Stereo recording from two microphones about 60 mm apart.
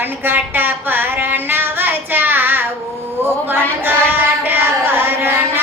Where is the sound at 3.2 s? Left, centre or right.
Right.